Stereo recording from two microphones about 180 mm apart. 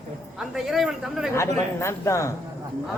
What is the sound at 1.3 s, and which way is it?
A woman's voice, 15° left (ahead or behind).